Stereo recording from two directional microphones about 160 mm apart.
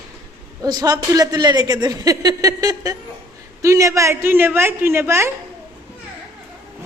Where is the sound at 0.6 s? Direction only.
25° right (ahead or behind).